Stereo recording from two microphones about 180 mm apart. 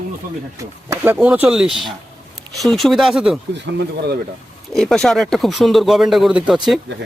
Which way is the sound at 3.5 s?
70° right (ahead or behind).